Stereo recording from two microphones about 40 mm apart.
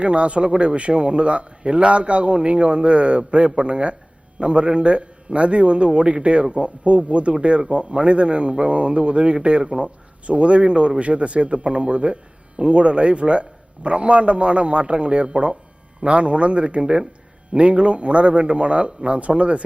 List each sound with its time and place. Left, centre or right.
0.0 s a man's voice: right